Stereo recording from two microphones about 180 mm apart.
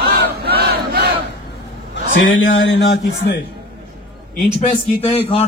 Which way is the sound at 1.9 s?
90° left.